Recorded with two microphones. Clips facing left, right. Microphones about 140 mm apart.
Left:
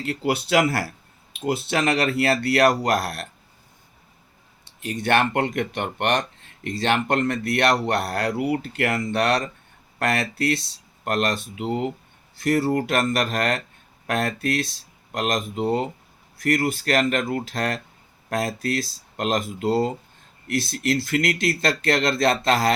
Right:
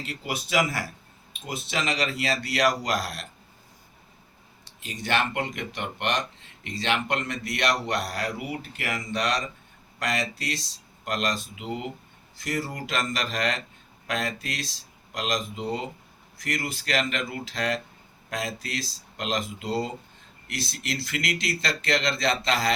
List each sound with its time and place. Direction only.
0.0 s speech: 60° left (ahead or behind)
4.8 s speech: 55° left (ahead or behind)